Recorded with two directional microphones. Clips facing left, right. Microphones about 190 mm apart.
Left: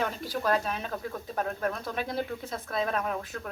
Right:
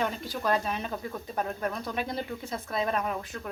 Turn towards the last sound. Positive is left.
turn(degrees=0)  # may be behind; listen again after turning